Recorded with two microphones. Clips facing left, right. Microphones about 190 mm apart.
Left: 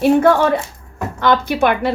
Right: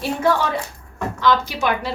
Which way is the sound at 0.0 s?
55° left (ahead or behind).